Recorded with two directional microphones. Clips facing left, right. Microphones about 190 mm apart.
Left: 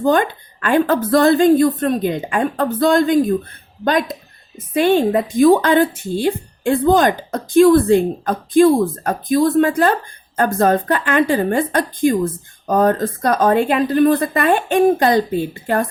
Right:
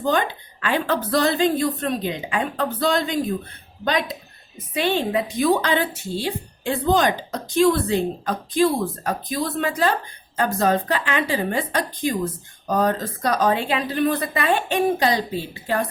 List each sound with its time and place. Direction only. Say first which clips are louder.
0.0 s a woman's voice: left 6 dB; 50° left (ahead or behind)